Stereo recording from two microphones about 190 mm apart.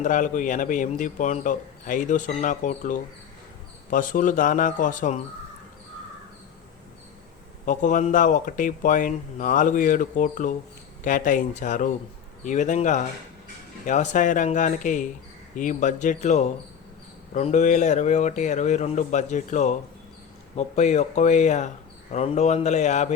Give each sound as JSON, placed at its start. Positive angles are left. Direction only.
{"t": 0.0, "sound": "speech", "side_deg": 40}
{"t": 7.6, "sound": "speech", "side_deg": 45}